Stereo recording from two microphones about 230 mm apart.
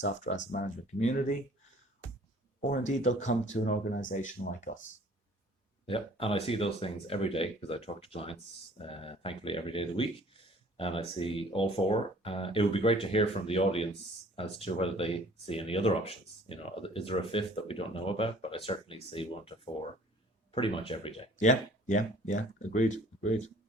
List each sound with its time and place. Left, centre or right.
0.0 s speech: left
2.6 s speech: left
5.8 s speech: left